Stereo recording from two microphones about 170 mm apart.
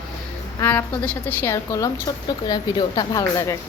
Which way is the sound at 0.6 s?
15° left (ahead or behind).